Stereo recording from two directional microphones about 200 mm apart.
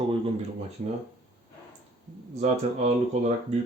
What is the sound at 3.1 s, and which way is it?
Speech, 35° right (ahead or behind).